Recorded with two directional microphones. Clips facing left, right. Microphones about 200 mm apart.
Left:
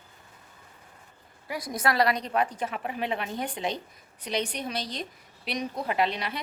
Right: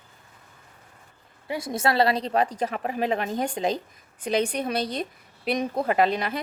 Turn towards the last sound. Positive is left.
turn(degrees=-45)  # may be behind; listen again after turning